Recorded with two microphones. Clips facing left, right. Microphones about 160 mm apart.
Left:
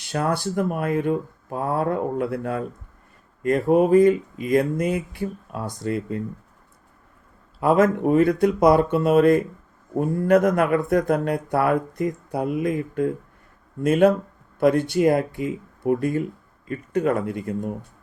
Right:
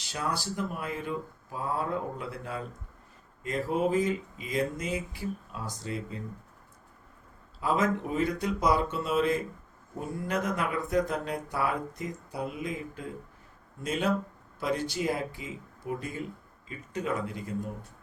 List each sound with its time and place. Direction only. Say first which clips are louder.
0.0 s speech: left 9 dB; 55° left (ahead or behind)
7.6 s speech: left 10 dB; 60° left (ahead or behind)